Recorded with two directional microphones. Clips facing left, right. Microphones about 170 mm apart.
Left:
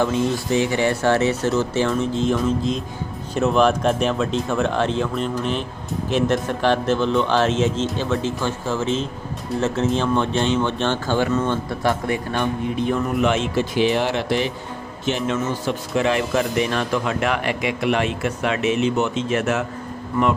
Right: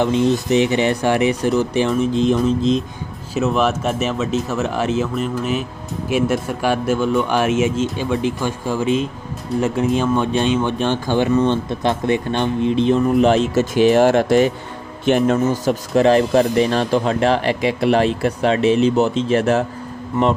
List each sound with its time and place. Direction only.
0.0 s speech: 20° right (ahead or behind)
3.3 s a man's voice: 5° right (ahead or behind); by 15.4 s 50° right (ahead or behind)
15.6 s speech: 40° right (ahead or behind)